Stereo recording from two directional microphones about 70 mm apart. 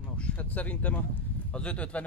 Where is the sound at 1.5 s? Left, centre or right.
Centre.